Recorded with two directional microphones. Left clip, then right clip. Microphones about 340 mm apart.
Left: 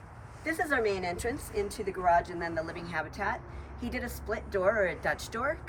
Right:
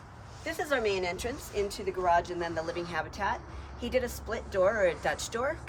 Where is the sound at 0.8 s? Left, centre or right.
Right.